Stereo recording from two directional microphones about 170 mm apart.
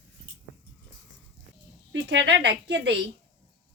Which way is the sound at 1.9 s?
90° right.